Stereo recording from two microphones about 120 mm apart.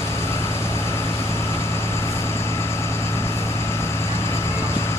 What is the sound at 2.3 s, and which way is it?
Vehicle, 20° left (ahead or behind).